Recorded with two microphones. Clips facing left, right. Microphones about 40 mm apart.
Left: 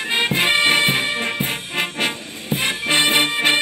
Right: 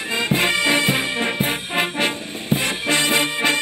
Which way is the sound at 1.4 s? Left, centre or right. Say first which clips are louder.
Right 2 dB; centre.